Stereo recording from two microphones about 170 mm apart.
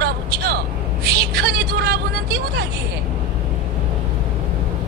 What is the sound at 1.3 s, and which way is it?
Speech, 65° right (ahead or behind).